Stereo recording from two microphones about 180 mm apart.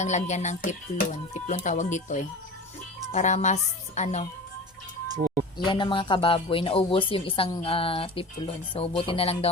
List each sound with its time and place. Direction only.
0.0 s a woman's voice: 40° left (ahead or behind)
5.1 s speech: 50° right (ahead or behind)
5.5 s speech: 25° left (ahead or behind)
9.0 s music: 30° left (ahead or behind)